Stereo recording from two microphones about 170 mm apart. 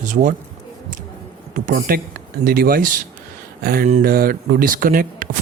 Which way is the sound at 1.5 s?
55° right (ahead or behind).